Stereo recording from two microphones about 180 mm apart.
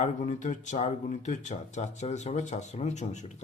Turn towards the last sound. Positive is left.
turn(degrees=40)  # may be behind; listen again after turning